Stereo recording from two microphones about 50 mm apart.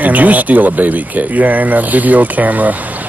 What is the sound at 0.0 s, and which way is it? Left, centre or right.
Speech, right.